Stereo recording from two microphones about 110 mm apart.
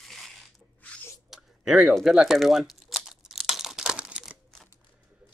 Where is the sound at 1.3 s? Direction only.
5° right (ahead or behind).